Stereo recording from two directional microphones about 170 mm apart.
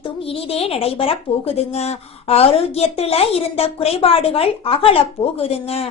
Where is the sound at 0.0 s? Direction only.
35° left (ahead or behind).